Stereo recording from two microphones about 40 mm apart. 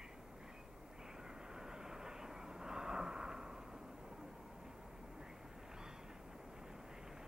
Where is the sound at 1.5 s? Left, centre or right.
Centre.